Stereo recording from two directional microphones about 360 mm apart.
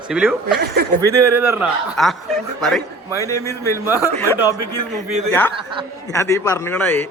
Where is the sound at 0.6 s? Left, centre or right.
Right.